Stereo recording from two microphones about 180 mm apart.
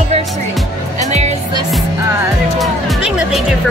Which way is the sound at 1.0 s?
40° right (ahead or behind).